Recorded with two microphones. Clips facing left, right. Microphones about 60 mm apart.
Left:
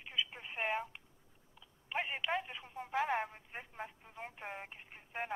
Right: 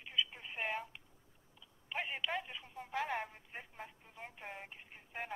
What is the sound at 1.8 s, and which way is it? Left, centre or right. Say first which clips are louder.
Telephone: left 2 dB; centre.